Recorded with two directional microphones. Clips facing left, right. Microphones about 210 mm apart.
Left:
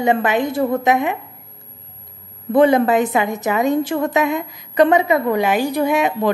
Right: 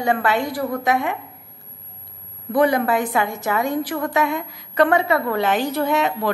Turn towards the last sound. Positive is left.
turn(degrees=15)  # may be behind; listen again after turning